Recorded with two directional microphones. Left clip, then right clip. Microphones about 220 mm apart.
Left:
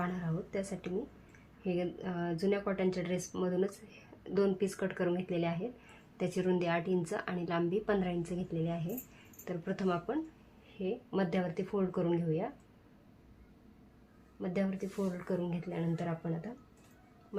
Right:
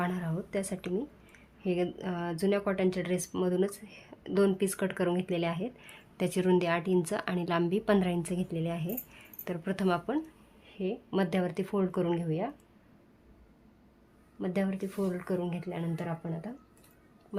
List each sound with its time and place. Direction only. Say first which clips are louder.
0.0 s a sound: right 4 dB; 50° right (ahead or behind)
1.6 s speech: right 4 dB; 45° right (ahead or behind)
14.4 s speech: right 3 dB; 40° right (ahead or behind)